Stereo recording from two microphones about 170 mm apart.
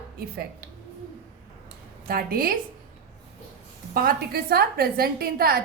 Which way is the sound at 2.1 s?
60° right (ahead or behind).